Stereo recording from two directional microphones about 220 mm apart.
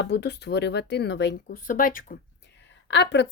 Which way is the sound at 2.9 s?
50° left (ahead or behind).